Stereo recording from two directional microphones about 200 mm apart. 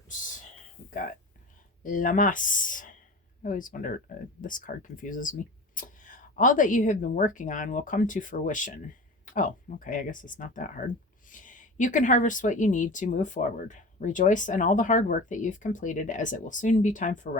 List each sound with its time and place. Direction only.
0.9 s speech: 40° left (ahead or behind)